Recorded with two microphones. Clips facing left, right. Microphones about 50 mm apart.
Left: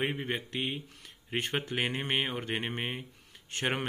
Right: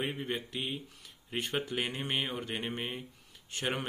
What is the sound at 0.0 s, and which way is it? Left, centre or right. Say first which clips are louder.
Speech: left 3 dB; left.